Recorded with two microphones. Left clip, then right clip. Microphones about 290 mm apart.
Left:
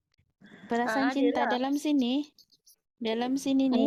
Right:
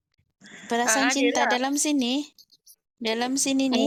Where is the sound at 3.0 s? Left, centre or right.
Right.